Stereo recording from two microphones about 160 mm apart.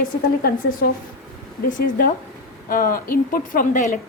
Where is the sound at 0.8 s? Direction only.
70° left (ahead or behind).